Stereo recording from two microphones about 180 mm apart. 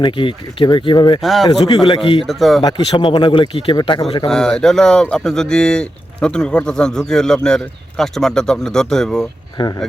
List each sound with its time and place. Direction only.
0.0 s speech: 30° left (ahead or behind)
1.2 s speech: centre (ahead or behind)
1.5 s speech: 25° left (ahead or behind)
2.2 s speech: centre (ahead or behind)
2.6 s speech: 30° left (ahead or behind)
4.3 s speech: 5° left (ahead or behind)